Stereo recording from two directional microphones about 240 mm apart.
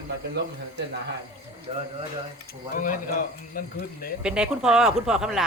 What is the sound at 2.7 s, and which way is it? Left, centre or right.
Speech, left.